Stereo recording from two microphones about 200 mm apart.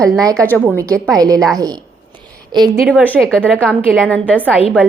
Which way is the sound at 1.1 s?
20° right (ahead or behind).